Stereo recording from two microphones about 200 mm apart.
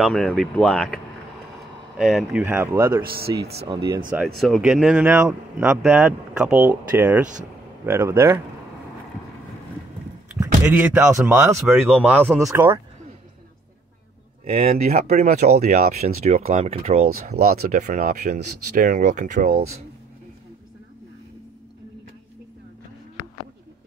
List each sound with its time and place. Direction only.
0.0 s speech: centre (ahead or behind)
2.0 s speech: centre (ahead or behind)
3.1 s speech: 50° right (ahead or behind)
3.6 s speech: 20° right (ahead or behind)
4.4 s speech: centre (ahead or behind)
10.4 s speech: 10° right (ahead or behind)
14.4 s speech: 40° right (ahead or behind)
17.3 s speech: 50° right (ahead or behind)